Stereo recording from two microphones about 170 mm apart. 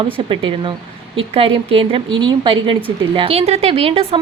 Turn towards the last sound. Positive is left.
turn(degrees=-35)  # may be behind; listen again after turning